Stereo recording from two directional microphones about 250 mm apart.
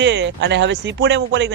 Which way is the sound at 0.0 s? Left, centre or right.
Right.